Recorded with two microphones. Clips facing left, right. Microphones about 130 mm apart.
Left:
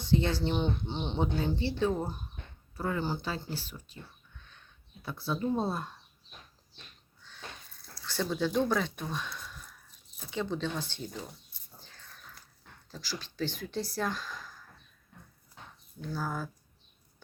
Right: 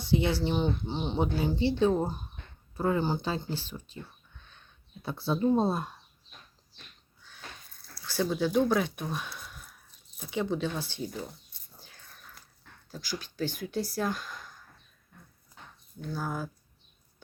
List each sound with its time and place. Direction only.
0.0 s speech: 10° right (ahead or behind)
1.5 s speech: 20° right (ahead or behind)
5.0 s speech: 25° right (ahead or behind)
7.2 s a sound: 10° right (ahead or behind)
7.9 s speech: 5° right (ahead or behind)
11.8 s a sound: 10° right (ahead or behind)
12.9 s speech: 5° right (ahead or behind)
16.0 s speech: 5° right (ahead or behind)